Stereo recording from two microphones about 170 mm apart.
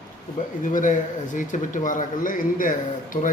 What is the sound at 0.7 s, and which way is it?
A man's voice, 50° left (ahead or behind).